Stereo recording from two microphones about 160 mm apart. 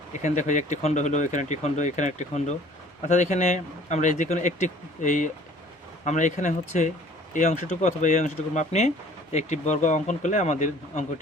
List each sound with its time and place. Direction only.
0.2 s speech: 50° left (ahead or behind)